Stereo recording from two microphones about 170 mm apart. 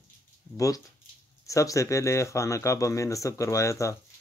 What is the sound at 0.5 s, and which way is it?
Speech, 20° left (ahead or behind).